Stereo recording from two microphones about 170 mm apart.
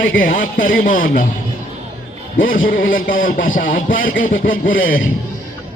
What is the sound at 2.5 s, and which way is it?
Speech, 55° left (ahead or behind).